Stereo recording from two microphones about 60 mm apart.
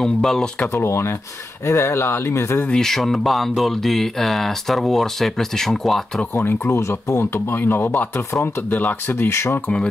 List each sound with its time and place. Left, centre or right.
0.0 s speech: centre
0.7 s speech: left
2.7 s speech: centre
6.3 s speech: left
6.7 s speech: left
8.3 s speech: left
8.6 s speech: left